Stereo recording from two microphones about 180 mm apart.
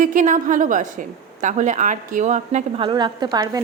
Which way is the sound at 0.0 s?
45° right (ahead or behind).